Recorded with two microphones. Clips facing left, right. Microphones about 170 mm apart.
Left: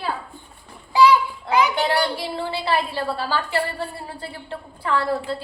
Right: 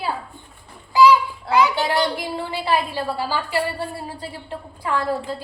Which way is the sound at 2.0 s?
15° right (ahead or behind).